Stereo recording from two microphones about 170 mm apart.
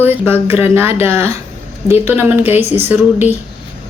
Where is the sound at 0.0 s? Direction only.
10° right (ahead or behind).